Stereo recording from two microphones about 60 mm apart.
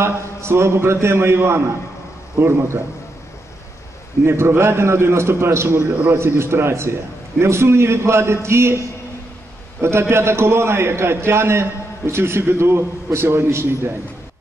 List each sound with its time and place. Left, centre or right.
0.0 s a man's voice: right
4.2 s a man's voice: right